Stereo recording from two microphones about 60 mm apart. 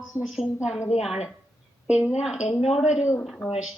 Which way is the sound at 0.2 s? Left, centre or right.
Centre.